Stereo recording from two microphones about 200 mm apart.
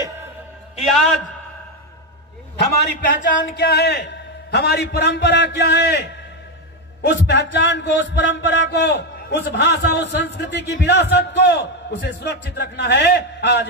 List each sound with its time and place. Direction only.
0.7 s a man's voice: centre (ahead or behind)
3.2 s a man's voice: 55° left (ahead or behind)